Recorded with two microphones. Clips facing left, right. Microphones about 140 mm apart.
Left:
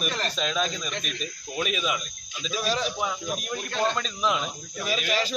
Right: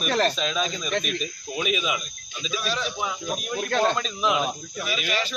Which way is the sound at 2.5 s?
35° left (ahead or behind).